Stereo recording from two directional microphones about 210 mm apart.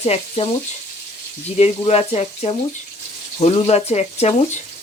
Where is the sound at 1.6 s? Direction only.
30° left (ahead or behind).